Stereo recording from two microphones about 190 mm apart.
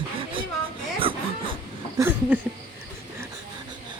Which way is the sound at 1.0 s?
25° right (ahead or behind).